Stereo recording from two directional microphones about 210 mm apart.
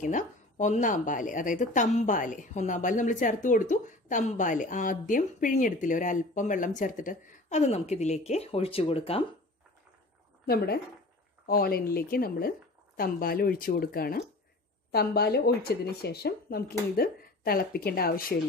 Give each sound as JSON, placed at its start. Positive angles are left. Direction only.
{"t": 0.0, "sound": "a woman's voice", "side_deg": 35}
{"t": 10.4, "sound": "speech", "side_deg": 50}